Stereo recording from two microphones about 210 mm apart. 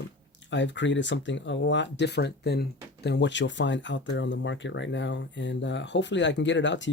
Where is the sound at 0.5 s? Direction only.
60° left (ahead or behind).